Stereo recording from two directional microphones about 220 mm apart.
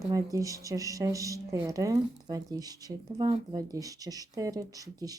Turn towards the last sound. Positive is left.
turn(degrees=-15)  # may be behind; listen again after turning